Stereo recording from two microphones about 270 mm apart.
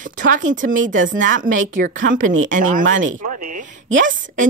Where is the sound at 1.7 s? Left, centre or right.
Right.